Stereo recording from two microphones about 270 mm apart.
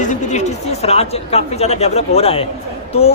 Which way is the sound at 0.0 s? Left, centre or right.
Left.